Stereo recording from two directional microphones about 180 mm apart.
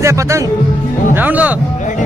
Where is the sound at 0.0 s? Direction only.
15° right (ahead or behind).